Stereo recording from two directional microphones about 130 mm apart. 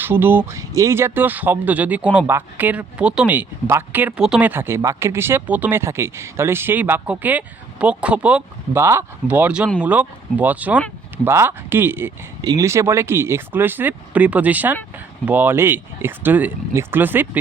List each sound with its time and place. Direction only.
0.0 s speech: 15° right (ahead or behind)
8.8 s speech: 20° right (ahead or behind)
12.4 s speech: 25° right (ahead or behind)